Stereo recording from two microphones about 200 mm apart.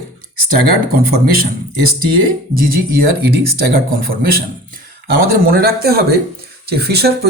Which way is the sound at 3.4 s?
50° right (ahead or behind).